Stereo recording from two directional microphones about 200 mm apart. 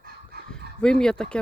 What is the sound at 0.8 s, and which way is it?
Speech, 5° left (ahead or behind).